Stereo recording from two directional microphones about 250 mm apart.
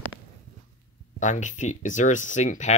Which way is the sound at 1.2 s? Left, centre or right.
Left.